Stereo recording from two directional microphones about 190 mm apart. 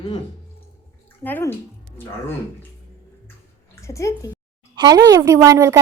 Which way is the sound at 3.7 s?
15° left (ahead or behind).